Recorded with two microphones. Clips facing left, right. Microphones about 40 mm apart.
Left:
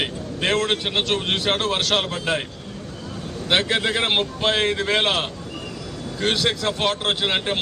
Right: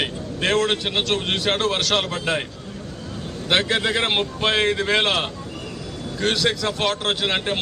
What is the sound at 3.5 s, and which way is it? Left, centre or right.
A man's voice, centre.